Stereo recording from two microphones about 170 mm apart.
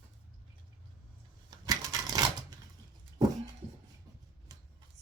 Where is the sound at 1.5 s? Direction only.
20° right (ahead or behind).